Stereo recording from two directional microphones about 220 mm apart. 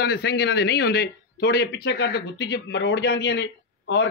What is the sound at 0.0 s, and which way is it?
Speech, 45° left (ahead or behind).